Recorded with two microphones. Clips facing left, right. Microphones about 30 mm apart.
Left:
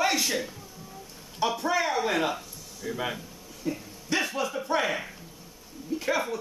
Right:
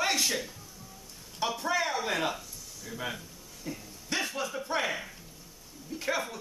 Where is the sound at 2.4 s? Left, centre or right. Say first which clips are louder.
Left 5 dB; left.